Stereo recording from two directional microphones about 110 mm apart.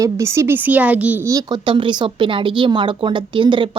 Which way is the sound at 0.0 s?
25° right (ahead or behind).